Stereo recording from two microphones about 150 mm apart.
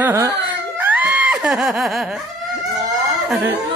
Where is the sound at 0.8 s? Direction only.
10° right (ahead or behind).